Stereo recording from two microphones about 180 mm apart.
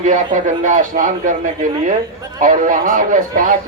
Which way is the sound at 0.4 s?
45° right (ahead or behind).